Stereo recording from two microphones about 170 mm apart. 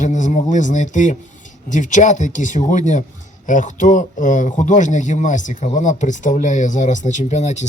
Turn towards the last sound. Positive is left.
turn(degrees=45)  # may be behind; listen again after turning